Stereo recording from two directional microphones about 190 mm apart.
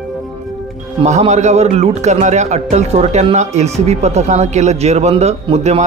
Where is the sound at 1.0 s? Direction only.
35° right (ahead or behind).